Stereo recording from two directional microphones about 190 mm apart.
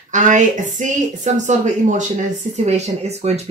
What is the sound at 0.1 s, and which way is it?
Speech, 40° right (ahead or behind).